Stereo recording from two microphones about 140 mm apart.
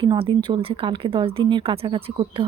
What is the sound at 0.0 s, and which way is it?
Speech, 35° right (ahead or behind).